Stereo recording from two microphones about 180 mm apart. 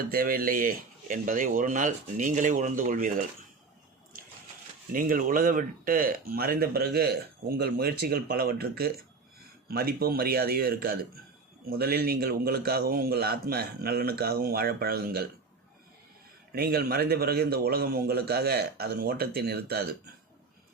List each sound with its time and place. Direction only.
0.1 s speech: 55° right (ahead or behind)
4.9 s speech: 50° right (ahead or behind)
16.5 s speech: 60° right (ahead or behind)